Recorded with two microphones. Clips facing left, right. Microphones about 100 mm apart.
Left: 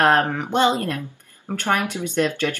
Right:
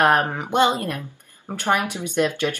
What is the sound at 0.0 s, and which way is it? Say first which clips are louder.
Speech: left 1 dB; 15° right (ahead or behind).